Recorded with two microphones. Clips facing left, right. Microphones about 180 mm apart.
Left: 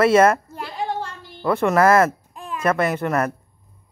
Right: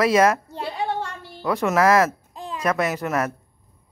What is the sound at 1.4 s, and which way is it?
Speech, centre (ahead or behind).